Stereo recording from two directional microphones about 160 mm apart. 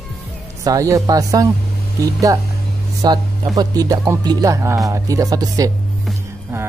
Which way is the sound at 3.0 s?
25° right (ahead or behind).